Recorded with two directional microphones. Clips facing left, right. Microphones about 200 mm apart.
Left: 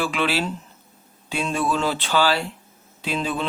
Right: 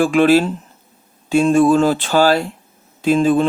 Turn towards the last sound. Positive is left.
turn(degrees=-45)  # may be behind; listen again after turning